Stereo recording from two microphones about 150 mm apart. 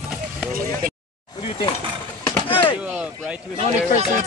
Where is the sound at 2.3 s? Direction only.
35° left (ahead or behind).